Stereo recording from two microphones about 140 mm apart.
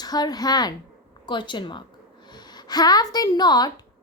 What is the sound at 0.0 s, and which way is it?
A woman's voice, 30° left (ahead or behind).